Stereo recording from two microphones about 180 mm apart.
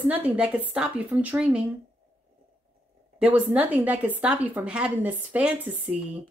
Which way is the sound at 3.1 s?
5° right (ahead or behind).